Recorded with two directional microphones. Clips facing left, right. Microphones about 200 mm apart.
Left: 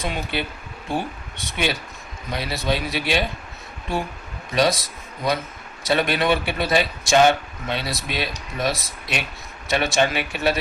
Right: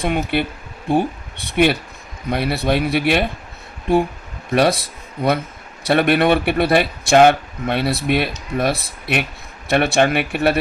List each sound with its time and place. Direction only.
0.0 s speech: 55° right (ahead or behind)
4.5 s speech: 60° right (ahead or behind)